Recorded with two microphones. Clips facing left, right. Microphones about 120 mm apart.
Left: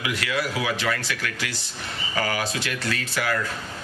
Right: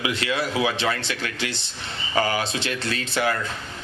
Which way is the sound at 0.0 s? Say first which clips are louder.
Right 2 dB; 25° right (ahead or behind).